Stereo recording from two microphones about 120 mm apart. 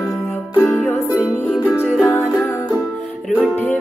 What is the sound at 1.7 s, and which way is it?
Music, 20° left (ahead or behind).